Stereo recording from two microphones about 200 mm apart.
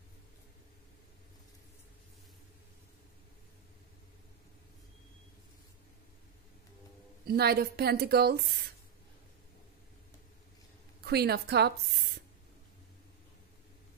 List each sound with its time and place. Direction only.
7.2 s a woman's voice: 50° right (ahead or behind)
11.0 s a woman's voice: 55° right (ahead or behind)